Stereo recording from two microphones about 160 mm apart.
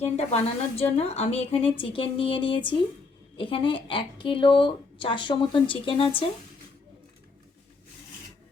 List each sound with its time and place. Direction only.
0.0 s speech: 40° left (ahead or behind)